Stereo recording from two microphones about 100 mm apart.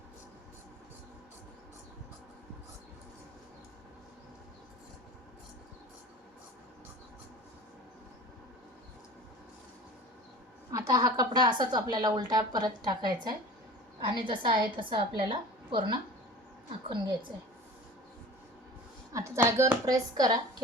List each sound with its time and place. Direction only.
10.7 s a woman's voice: 35° right (ahead or behind); by 16.0 s 50° right (ahead or behind)
19.1 s speech: 30° right (ahead or behind)